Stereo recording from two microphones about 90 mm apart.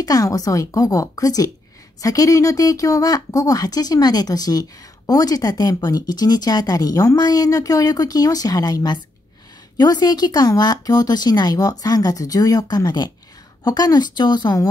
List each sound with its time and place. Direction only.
0.0 s a woman's voice: 40° left (ahead or behind)